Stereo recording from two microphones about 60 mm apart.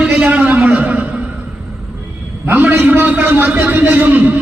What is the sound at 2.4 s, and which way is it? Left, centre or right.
A man's voice, right.